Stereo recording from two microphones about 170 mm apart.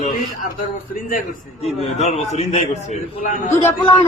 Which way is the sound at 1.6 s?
40° left (ahead or behind).